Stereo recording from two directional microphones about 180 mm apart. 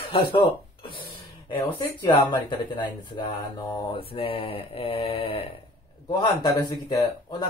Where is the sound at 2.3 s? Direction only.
25° left (ahead or behind).